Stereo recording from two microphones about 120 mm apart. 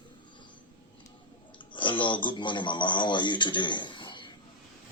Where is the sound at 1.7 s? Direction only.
45° left (ahead or behind).